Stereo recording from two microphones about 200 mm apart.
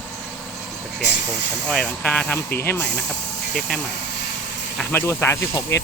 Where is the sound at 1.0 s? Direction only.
60° left (ahead or behind).